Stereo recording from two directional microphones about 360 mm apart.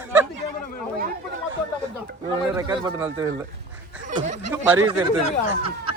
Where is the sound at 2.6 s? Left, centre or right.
Centre.